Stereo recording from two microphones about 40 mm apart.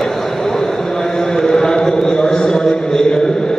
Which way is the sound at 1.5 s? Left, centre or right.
Centre.